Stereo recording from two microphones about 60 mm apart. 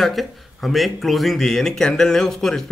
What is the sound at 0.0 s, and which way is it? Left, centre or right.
Speech, centre.